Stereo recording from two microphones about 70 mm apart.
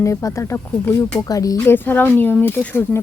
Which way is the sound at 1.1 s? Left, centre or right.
Left.